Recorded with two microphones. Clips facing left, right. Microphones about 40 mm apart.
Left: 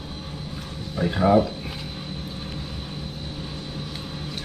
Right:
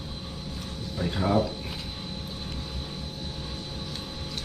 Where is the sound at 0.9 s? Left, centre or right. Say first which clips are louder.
Left 7 dB; centre.